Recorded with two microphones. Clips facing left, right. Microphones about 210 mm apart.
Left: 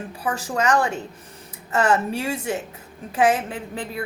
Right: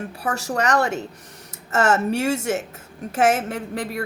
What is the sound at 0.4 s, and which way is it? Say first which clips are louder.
Speech: even; 40° right (ahead or behind).